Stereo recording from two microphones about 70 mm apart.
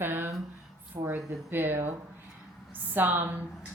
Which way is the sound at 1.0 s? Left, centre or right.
Right.